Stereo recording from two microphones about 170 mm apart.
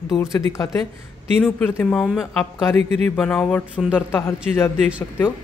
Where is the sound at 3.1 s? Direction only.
5° left (ahead or behind).